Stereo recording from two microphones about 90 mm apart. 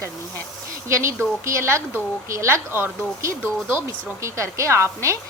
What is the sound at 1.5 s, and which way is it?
A woman's voice, 30° right (ahead or behind).